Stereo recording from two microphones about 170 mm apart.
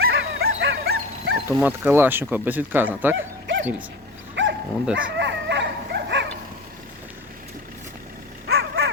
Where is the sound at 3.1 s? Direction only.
90° right.